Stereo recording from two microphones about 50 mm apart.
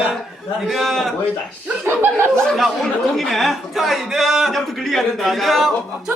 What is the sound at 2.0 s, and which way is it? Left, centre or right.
Speech, right.